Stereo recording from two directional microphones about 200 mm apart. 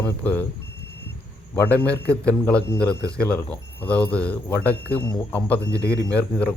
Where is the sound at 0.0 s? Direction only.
10° left (ahead or behind).